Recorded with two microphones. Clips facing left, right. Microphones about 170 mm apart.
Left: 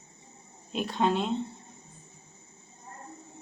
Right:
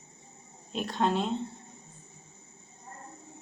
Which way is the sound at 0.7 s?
Centre (ahead or behind).